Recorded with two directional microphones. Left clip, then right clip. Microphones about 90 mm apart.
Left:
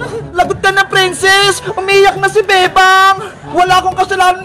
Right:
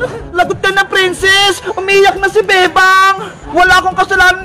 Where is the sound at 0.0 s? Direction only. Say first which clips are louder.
Right 1 dB; 30° right (ahead or behind).